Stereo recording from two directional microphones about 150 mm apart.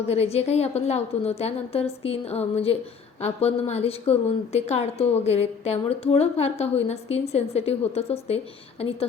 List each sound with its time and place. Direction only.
0.1 s a woman's voice: 45° left (ahead or behind)